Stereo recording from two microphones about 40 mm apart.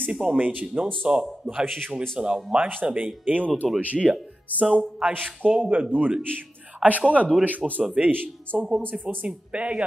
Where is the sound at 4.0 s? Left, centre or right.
Centre.